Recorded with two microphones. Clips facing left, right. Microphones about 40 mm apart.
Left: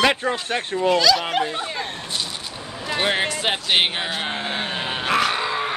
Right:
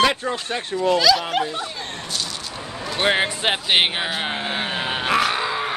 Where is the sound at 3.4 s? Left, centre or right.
Centre.